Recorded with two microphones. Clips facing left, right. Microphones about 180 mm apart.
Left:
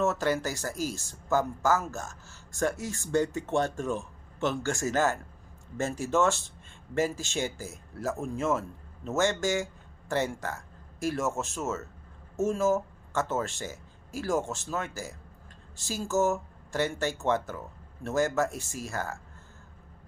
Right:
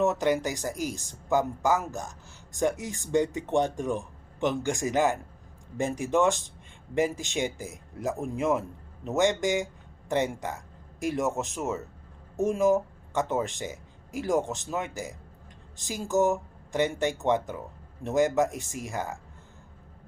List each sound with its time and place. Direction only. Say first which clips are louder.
0.0 s speech: right 2 dB; 15° right (ahead or behind)